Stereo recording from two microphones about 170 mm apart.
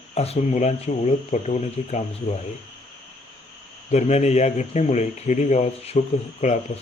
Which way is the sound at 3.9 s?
40° left (ahead or behind).